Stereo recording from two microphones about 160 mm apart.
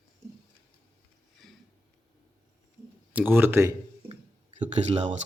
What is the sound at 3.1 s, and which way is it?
Speech, 10° right (ahead or behind).